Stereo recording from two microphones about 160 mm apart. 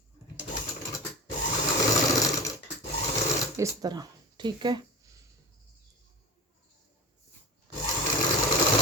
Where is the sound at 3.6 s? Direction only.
25° right (ahead or behind).